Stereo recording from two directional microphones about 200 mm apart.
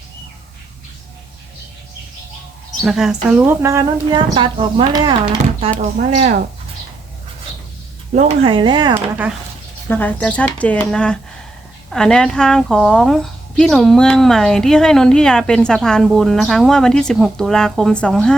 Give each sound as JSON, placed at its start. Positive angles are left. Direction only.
{"t": 2.8, "sound": "a woman's voice", "side_deg": -5}
{"t": 5.8, "sound": "speech", "side_deg": -35}
{"t": 8.1, "sound": "speech", "side_deg": -35}
{"t": 9.0, "sound": "a woman's voice", "side_deg": -10}
{"t": 9.9, "sound": "a woman's voice", "side_deg": 10}